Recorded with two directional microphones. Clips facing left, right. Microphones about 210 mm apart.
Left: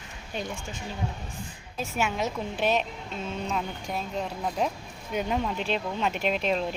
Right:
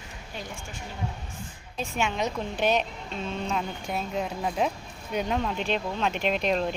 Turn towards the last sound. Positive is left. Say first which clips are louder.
# right 1 dB
turn(degrees=0)  # may be behind; listen again after turning